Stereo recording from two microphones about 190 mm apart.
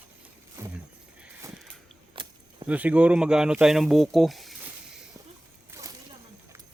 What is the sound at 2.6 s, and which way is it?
Speech, 10° right (ahead or behind).